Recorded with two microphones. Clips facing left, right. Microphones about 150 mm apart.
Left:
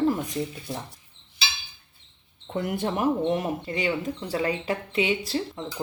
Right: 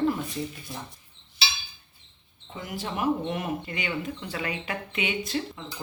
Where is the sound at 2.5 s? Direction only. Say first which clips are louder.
Left 7 dB; 60° left (ahead or behind); by 5.4 s 30° left (ahead or behind).